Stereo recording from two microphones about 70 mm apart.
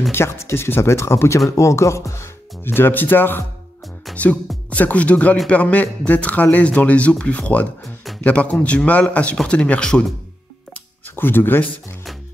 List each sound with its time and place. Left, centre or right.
0.1 s speech: left
2.7 s speech: left
4.1 s music: centre
4.6 s speech: left
7.8 s music: centre
8.2 s a man's voice: centre
11.1 s speech: left